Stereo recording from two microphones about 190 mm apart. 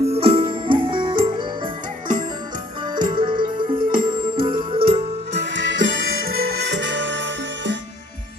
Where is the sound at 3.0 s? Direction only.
25° right (ahead or behind).